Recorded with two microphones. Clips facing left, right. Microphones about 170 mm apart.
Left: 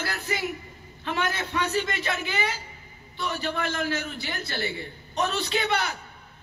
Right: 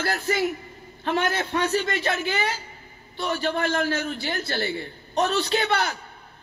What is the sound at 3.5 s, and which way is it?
Speech, 35° right (ahead or behind).